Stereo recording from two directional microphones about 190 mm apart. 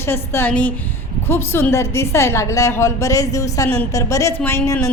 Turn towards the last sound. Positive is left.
turn(degrees=15)  # may be behind; listen again after turning